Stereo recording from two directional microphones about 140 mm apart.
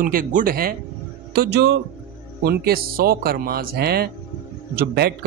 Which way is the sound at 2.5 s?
90° right.